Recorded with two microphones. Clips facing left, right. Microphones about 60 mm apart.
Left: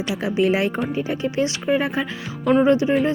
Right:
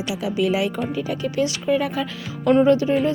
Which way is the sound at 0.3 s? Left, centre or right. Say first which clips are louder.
Left 2 dB; left.